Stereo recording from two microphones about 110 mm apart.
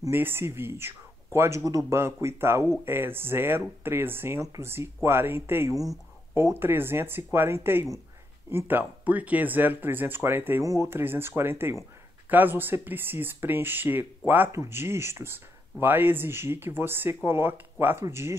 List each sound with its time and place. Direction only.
0.1 s speech: 20° right (ahead or behind)